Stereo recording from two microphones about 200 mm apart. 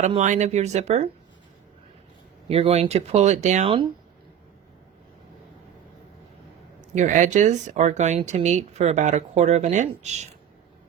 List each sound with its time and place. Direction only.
0.0 s speech: 35° right (ahead or behind)
2.5 s speech: 30° right (ahead or behind)
6.9 s speech: 40° right (ahead or behind)